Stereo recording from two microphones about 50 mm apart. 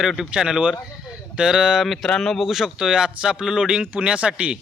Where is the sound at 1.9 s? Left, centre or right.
Centre.